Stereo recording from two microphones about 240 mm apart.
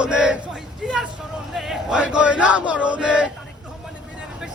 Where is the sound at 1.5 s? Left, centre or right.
Centre.